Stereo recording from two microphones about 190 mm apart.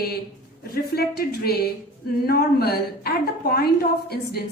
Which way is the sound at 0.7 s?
55° left (ahead or behind).